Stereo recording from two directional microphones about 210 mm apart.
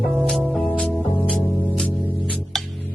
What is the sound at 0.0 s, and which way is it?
Music, centre (ahead or behind).